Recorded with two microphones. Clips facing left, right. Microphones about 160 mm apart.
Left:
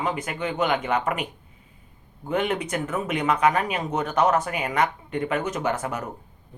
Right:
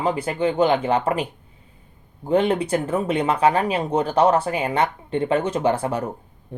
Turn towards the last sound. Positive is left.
turn(degrees=-30)  # may be behind; listen again after turning